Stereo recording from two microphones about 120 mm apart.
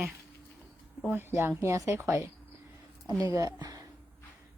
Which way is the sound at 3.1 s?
40° left (ahead or behind).